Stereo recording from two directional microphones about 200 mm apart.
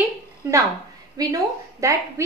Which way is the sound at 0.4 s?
15° right (ahead or behind).